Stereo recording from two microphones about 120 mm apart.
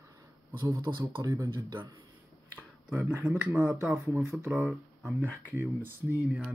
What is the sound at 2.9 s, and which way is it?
Speech, 15° right (ahead or behind).